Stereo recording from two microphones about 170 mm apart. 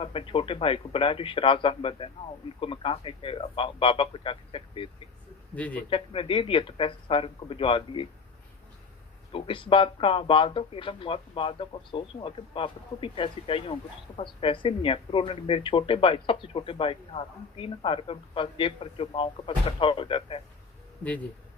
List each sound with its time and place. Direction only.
0.0 s speech: 30° left (ahead or behind)
5.5 s speech: 10° left (ahead or behind)
5.9 s speech: 30° left (ahead or behind)
9.3 s speech: 30° left (ahead or behind)